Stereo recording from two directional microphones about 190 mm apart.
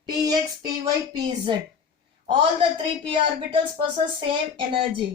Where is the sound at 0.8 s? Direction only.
25° right (ahead or behind).